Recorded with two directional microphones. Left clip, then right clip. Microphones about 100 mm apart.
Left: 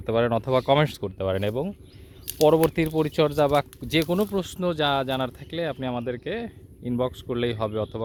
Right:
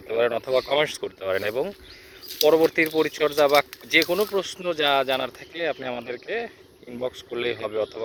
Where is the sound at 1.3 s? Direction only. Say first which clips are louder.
Right 2 dB; 20° left (ahead or behind).